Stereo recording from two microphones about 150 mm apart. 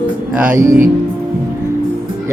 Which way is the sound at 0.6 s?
65° right (ahead or behind).